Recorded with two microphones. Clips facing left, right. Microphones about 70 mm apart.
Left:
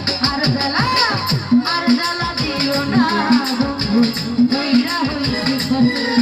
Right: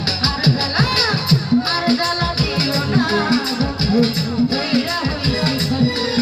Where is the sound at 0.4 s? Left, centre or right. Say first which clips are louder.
Right 1 dB; left.